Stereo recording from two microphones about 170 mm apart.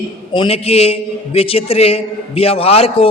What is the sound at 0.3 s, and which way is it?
A man's voice, 35° left (ahead or behind).